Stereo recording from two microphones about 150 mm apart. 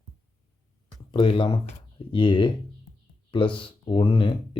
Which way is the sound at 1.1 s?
35° left (ahead or behind).